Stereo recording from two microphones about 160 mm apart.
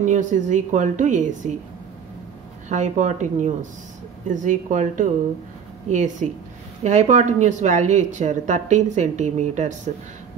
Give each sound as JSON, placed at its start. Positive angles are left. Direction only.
{"t": 0.0, "sound": "speech", "side_deg": -50}
{"t": 2.7, "sound": "speech", "side_deg": -50}